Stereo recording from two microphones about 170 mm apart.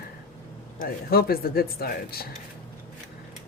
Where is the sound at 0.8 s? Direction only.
65° left (ahead or behind).